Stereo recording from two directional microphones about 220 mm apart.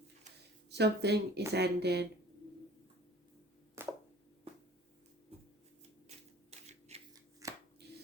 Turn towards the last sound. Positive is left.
turn(degrees=-50)  # may be behind; listen again after turning